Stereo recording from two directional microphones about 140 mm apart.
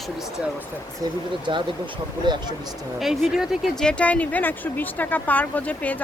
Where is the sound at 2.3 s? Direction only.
35° right (ahead or behind).